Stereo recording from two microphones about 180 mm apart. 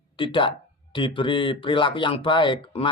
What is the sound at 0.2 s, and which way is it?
Speech, 25° left (ahead or behind).